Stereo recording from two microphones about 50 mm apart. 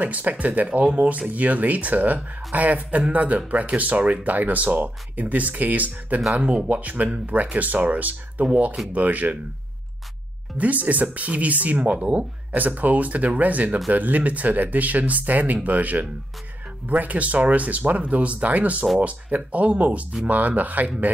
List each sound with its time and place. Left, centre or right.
0.0 s speech: right
10.6 s speech: right